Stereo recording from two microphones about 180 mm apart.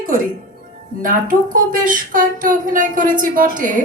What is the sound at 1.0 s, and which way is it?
Speech, 50° right (ahead or behind).